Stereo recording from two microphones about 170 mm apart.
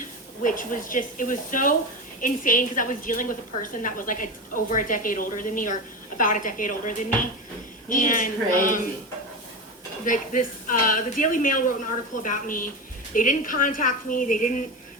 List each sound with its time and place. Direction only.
0.4 s a woman's voice: 50° left (ahead or behind)
10.1 s a woman's voice: 50° left (ahead or behind)